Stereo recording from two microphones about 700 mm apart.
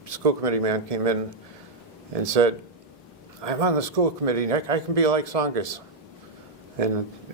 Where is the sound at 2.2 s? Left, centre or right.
Right.